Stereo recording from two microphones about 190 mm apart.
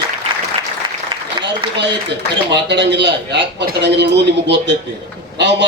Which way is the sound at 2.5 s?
65° right (ahead or behind).